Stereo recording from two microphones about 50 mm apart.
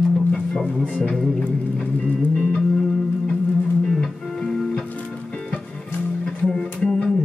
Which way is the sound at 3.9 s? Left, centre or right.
Centre.